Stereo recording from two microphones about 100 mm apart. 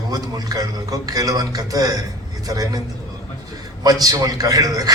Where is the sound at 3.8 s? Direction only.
40° right (ahead or behind).